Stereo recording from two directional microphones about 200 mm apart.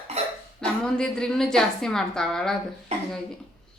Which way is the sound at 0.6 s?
5° left (ahead or behind).